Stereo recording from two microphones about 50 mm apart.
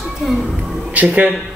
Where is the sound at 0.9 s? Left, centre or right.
Right.